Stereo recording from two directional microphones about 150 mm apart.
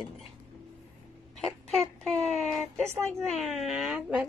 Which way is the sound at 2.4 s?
Centre (ahead or behind).